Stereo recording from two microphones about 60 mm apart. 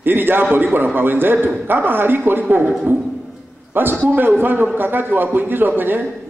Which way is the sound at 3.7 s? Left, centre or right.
Right.